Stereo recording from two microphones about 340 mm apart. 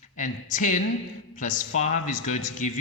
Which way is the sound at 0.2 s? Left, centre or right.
Left.